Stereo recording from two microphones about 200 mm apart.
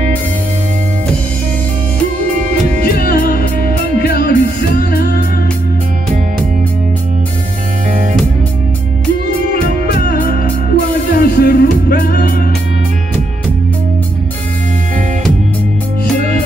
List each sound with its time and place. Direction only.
3.0 s music: 50° left (ahead or behind)
9.9 s music: 50° left (ahead or behind)